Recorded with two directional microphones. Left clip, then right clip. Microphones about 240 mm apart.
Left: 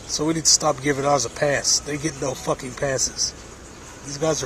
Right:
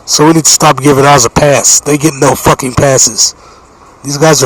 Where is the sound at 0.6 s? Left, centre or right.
Right.